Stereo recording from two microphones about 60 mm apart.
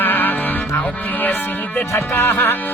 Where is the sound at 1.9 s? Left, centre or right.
Left.